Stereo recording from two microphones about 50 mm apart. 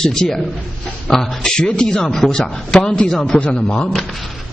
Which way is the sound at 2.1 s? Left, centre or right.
Centre.